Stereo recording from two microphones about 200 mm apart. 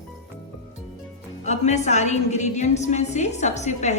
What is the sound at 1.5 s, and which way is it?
A woman's voice, 35° left (ahead or behind).